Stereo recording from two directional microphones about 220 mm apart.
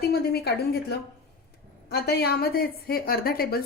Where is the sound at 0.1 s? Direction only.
45° left (ahead or behind).